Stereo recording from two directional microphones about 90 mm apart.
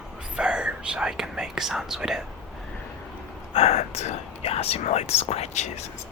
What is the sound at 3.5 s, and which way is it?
Whispering, 90° left.